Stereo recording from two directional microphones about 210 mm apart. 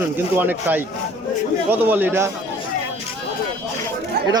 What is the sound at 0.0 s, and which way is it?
Speech, 10° right (ahead or behind).